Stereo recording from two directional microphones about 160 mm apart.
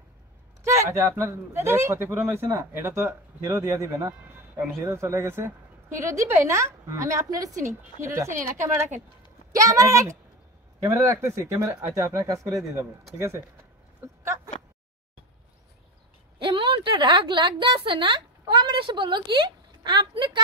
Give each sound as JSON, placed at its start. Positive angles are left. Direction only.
{"t": 0.7, "sound": "a woman's voice", "side_deg": -20}
{"t": 8.3, "sound": "a woman's voice", "side_deg": -50}
{"t": 9.5, "sound": "a woman's voice", "side_deg": -20}
{"t": 14.0, "sound": "a sound", "side_deg": -20}
{"t": 16.3, "sound": "a woman's voice", "side_deg": -30}